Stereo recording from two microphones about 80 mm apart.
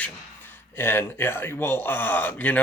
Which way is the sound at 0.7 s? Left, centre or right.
Left.